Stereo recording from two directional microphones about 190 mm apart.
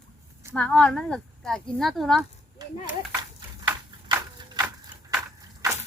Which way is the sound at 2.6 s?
20° right (ahead or behind).